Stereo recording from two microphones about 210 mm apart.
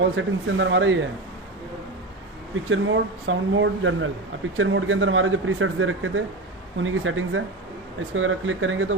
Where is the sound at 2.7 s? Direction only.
70° right (ahead or behind).